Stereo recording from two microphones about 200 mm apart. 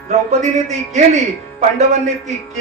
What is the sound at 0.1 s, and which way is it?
A man's voice, 35° right (ahead or behind).